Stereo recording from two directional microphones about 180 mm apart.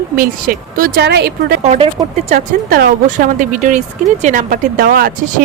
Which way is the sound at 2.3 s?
50° right (ahead or behind).